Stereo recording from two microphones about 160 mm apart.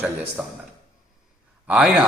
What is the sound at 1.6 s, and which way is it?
Speech, 5° right (ahead or behind).